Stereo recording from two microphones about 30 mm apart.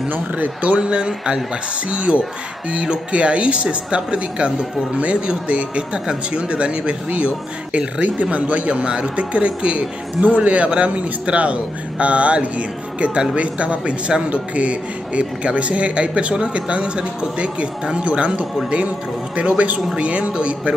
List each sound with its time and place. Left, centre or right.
0.7 s a man's voice: right
8.2 s speech: right
10.2 s a man's voice: right
10.5 s a man's voice: right